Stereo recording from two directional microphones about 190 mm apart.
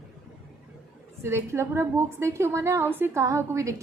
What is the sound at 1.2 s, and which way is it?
A woman's voice, 15° right (ahead or behind).